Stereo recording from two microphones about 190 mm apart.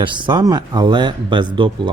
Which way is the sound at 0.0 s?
25° right (ahead or behind).